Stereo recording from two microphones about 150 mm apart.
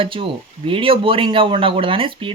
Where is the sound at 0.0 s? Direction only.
35° right (ahead or behind).